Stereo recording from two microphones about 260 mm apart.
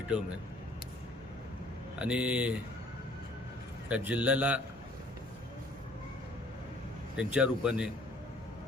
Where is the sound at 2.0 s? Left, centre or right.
Centre.